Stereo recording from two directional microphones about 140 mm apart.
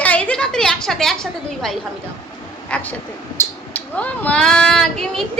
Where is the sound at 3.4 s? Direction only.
20° left (ahead or behind).